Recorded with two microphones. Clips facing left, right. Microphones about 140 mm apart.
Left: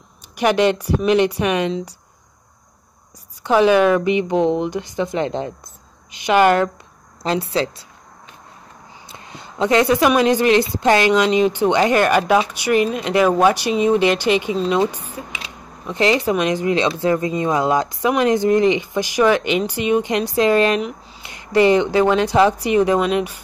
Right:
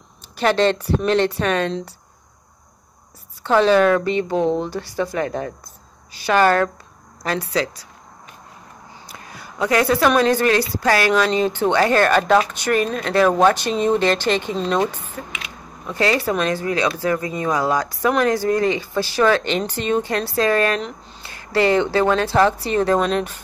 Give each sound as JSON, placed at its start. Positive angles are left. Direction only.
{"t": 0.4, "sound": "speech", "side_deg": 15}
{"t": 3.4, "sound": "speech", "side_deg": 15}
{"t": 9.0, "sound": "speech", "side_deg": 25}